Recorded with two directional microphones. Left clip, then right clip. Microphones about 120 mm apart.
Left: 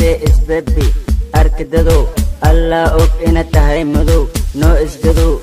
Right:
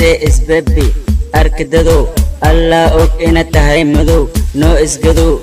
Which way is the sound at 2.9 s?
Centre (ahead or behind).